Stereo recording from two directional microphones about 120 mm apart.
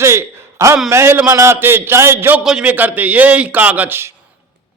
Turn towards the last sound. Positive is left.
turn(degrees=-20)  # may be behind; listen again after turning